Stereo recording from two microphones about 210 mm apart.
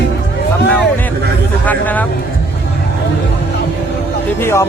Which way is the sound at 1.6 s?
10° left (ahead or behind).